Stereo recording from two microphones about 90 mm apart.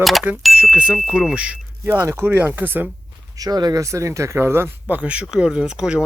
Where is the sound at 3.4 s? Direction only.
45° right (ahead or behind).